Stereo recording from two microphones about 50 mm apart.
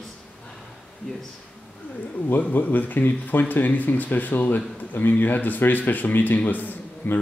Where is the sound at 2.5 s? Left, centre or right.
Left.